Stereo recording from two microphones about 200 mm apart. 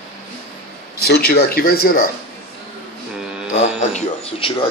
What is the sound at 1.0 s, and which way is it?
Speech, 50° left (ahead or behind).